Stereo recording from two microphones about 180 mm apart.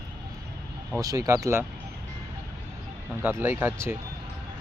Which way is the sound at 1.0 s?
20° right (ahead or behind).